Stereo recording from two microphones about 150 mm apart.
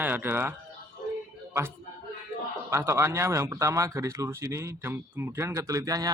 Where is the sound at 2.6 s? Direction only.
20° right (ahead or behind).